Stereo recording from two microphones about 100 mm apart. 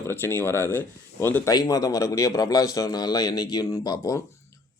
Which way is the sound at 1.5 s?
35° left (ahead or behind).